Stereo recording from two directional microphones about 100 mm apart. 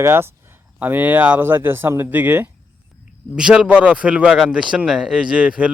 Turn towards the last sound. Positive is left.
turn(degrees=-10)  # may be behind; listen again after turning